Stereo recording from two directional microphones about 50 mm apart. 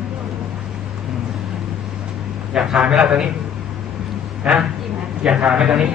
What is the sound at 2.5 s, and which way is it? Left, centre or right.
Speech, centre.